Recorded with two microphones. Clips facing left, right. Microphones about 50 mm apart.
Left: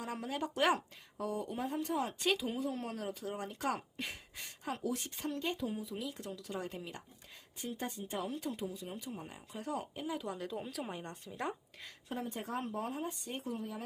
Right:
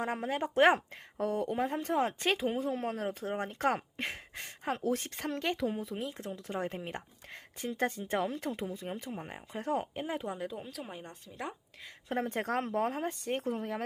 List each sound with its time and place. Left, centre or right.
0.0 s speech: right
1.2 s speech: right
7.6 s speech: right
10.2 s speech: centre
10.5 s speech: centre
12.0 s speech: right